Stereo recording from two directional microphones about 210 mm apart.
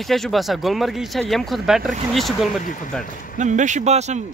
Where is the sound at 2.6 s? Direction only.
40° left (ahead or behind).